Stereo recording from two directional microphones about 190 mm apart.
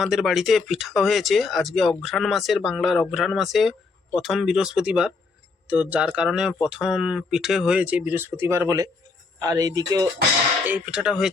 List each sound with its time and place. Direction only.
0.0 s speech: centre (ahead or behind); by 10.1 s 20° right (ahead or behind)
10.7 s speech: 5° right (ahead or behind)